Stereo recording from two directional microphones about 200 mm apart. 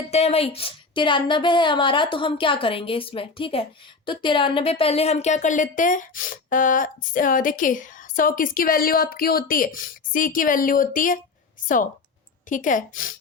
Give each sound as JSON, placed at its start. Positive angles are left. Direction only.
{"t": 0.1, "sound": "a woman's voice", "side_deg": 30}
{"t": 12.5, "sound": "a woman's voice", "side_deg": 40}